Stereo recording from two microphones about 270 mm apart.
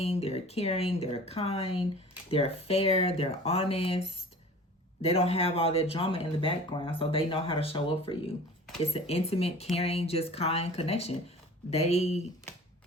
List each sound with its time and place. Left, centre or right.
0.0 s speech: left